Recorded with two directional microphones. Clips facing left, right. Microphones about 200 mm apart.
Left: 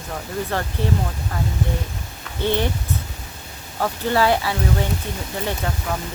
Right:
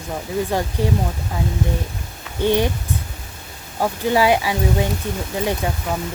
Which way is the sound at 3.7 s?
15° right (ahead or behind).